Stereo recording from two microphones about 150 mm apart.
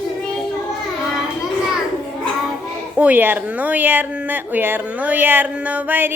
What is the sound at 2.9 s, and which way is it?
Speech, 10° right (ahead or behind).